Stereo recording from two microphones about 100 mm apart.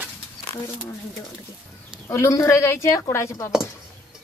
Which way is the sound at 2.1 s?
30° left (ahead or behind).